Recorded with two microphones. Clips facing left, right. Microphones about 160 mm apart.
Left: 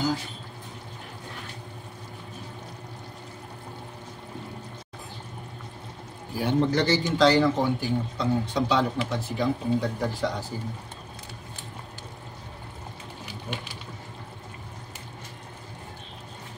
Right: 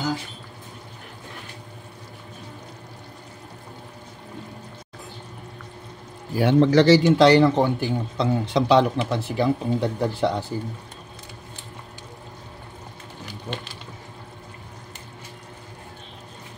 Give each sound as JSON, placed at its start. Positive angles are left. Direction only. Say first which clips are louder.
{"t": 6.3, "sound": "a man's voice", "louder": "right 7 dB", "side_deg": -85}